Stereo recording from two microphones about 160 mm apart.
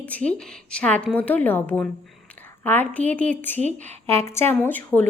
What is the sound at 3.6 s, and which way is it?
Speech, 45° right (ahead or behind).